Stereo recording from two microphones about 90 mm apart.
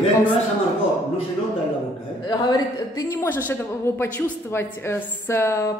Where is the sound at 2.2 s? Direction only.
50° left (ahead or behind).